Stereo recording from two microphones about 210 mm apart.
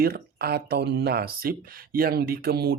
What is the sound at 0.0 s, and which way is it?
Speech, 50° right (ahead or behind).